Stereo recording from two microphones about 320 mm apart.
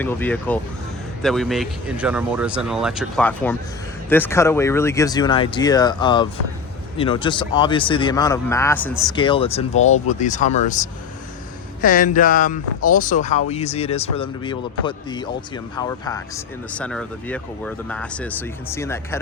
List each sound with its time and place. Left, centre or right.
0.0 s speech: centre; by 10.6 s left
11.8 s speech: left; by 19.2 s centre